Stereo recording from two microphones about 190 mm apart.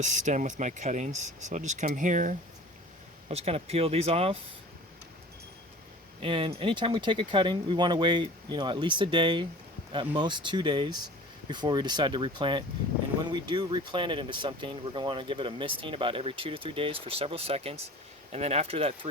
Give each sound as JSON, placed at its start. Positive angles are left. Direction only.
{"t": 0.0, "sound": "speech", "side_deg": -40}
{"t": 6.2, "sound": "speech", "side_deg": -25}